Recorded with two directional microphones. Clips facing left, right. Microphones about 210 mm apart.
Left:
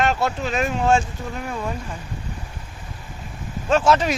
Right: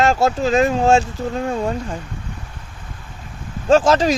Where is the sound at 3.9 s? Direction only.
35° right (ahead or behind).